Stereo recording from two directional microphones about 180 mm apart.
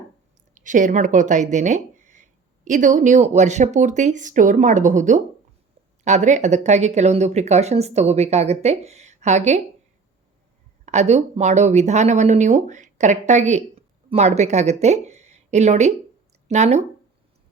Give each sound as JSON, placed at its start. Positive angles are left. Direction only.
{"t": 0.5, "sound": "speech", "side_deg": -45}
{"t": 10.8, "sound": "speech", "side_deg": -40}